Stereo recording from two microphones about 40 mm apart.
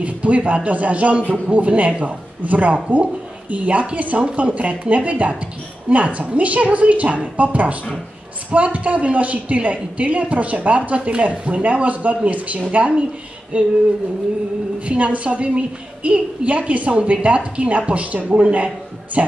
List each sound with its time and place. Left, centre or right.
0.0 s a woman's voice: right
14.9 s a woman's voice: right